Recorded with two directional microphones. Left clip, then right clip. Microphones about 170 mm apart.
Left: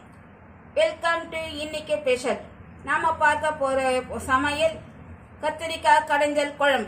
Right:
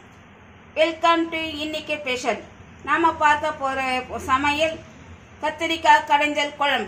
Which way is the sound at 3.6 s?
50° right (ahead or behind).